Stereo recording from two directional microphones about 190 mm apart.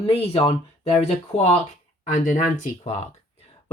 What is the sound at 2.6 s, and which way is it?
Speech, 40° left (ahead or behind).